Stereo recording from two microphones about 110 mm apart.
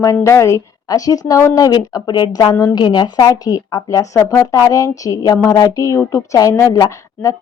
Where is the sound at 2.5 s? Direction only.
30° left (ahead or behind).